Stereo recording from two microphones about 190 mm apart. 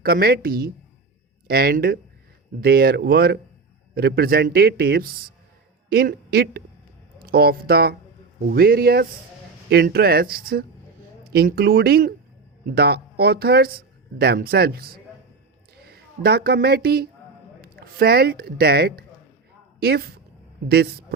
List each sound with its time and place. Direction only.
0.0 s speech: 55° right (ahead or behind)